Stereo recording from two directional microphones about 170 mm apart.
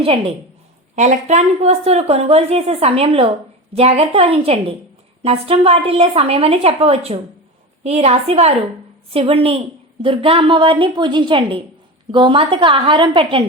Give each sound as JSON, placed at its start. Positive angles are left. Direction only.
{"t": 0.0, "sound": "speech", "side_deg": -35}
{"t": 0.9, "sound": "a woman's voice", "side_deg": -45}